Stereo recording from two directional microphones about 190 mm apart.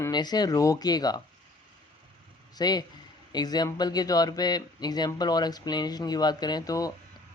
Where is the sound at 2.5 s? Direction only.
20° left (ahead or behind).